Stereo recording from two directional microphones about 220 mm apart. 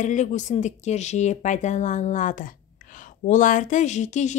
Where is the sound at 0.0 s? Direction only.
35° left (ahead or behind).